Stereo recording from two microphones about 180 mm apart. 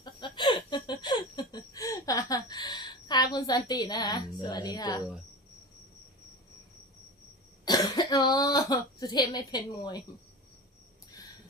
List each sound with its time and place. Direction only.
0.0 s laughter: 25° left (ahead or behind)
7.6 s speech: 20° left (ahead or behind)